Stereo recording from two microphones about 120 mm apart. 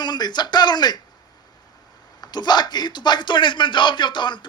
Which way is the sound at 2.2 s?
35° left (ahead or behind).